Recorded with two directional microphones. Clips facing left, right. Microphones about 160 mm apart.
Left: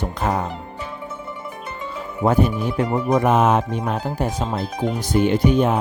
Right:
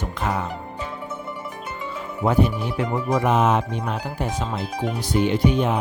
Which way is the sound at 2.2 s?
45° left (ahead or behind).